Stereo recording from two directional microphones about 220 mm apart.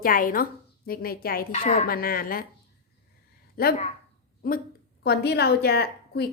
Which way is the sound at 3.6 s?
45° left (ahead or behind).